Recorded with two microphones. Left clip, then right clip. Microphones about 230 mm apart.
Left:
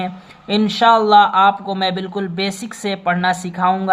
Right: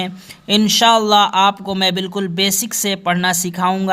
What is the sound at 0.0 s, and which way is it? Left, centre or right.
Speech, right.